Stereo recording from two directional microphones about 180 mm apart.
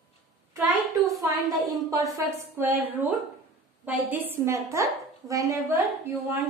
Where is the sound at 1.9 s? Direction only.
15° right (ahead or behind).